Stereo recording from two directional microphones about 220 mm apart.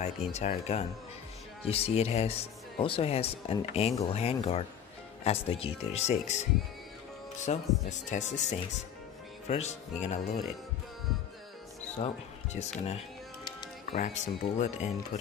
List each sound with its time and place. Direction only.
0.0 s speech: 30° left (ahead or behind)
7.5 s speech: 30° left (ahead or behind)
12.5 s speech: 30° left (ahead or behind)
13.5 s music: 20° left (ahead or behind)
13.9 s speech: 30° left (ahead or behind)